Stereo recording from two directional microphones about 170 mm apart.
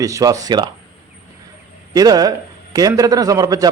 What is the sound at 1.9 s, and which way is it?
A man's voice, 20° right (ahead or behind).